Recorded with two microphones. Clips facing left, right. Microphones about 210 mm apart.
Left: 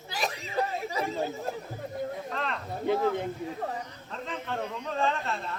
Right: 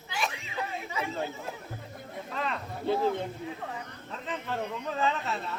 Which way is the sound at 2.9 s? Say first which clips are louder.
Left 1 dB; 15° left (ahead or behind).